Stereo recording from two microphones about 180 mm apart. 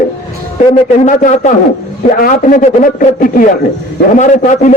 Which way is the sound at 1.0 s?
45° left (ahead or behind).